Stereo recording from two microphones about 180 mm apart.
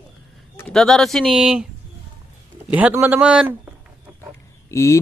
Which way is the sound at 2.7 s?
10° right (ahead or behind).